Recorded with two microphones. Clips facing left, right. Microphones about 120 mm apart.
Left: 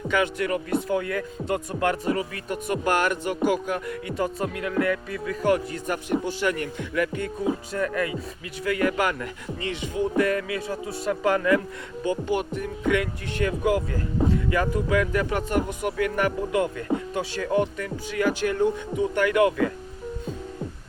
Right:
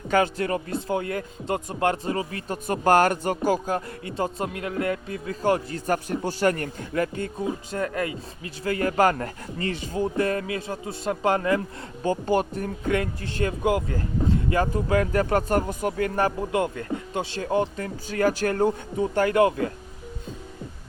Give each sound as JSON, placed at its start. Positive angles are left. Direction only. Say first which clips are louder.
{"t": 0.1, "sound": "speech", "louder": "right 2 dB", "side_deg": -35}